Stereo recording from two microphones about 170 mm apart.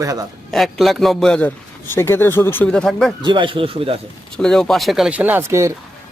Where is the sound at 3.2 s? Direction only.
30° right (ahead or behind).